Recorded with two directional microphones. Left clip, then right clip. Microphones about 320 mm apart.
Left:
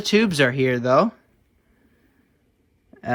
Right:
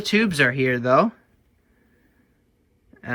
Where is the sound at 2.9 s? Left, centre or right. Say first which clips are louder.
Left 3 dB; centre.